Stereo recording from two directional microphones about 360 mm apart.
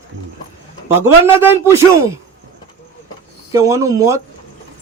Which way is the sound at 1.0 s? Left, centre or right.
Centre.